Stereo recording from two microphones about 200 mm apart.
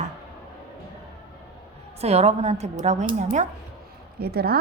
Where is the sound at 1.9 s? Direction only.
30° right (ahead or behind).